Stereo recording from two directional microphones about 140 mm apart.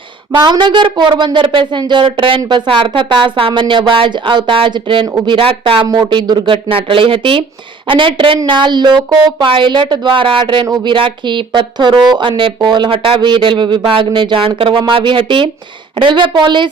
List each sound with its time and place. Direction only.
0.3 s speech: 30° right (ahead or behind)